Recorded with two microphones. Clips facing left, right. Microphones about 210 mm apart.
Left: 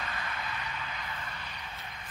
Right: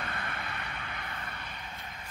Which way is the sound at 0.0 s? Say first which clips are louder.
Even; 55° right (ahead or behind).